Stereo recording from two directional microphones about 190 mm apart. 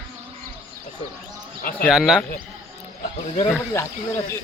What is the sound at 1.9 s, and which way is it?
Speech, centre (ahead or behind).